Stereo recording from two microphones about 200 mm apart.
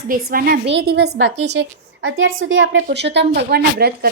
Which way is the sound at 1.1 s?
65° right (ahead or behind).